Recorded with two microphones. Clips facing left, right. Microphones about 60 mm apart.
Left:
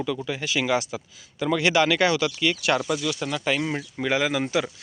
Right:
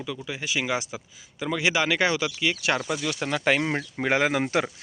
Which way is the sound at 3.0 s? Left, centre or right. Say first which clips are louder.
Right 1 dB; right.